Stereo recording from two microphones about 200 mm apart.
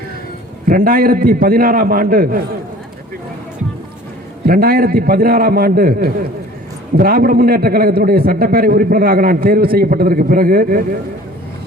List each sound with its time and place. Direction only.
0.7 s a man's voice: 45° right (ahead or behind)
4.4 s a man's voice: 50° right (ahead or behind)